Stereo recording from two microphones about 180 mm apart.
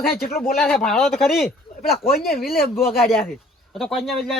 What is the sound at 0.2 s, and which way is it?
Speech, 55° left (ahead or behind).